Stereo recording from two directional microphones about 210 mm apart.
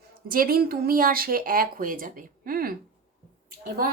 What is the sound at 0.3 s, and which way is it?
Speech, 45° right (ahead or behind).